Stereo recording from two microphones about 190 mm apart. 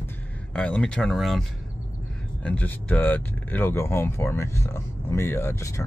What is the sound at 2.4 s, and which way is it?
Speech, 10° left (ahead or behind).